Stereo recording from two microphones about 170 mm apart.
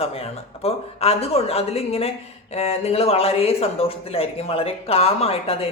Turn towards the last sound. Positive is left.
turn(degrees=35)  # may be behind; listen again after turning